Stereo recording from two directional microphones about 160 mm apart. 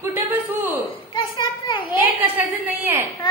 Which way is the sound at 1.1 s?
30° left (ahead or behind).